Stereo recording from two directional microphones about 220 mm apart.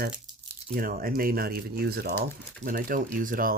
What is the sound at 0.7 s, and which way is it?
Speech, 40° right (ahead or behind).